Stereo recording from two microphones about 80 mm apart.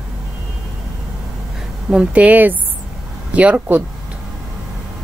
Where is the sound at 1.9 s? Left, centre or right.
Centre.